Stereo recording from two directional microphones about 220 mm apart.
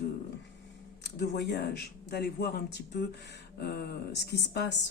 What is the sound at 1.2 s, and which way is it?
Speech, 50° left (ahead or behind).